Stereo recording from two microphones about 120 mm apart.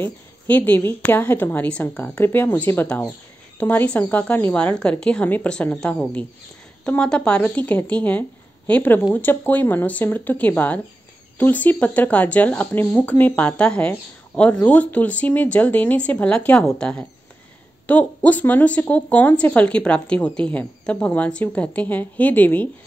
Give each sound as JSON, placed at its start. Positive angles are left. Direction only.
{"t": 0.0, "sound": "speech", "side_deg": 15}